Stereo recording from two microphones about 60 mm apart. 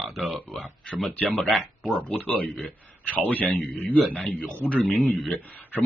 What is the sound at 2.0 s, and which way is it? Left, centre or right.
Speech, left.